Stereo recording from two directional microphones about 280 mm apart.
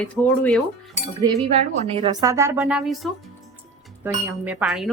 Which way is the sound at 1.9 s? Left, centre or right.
Centre.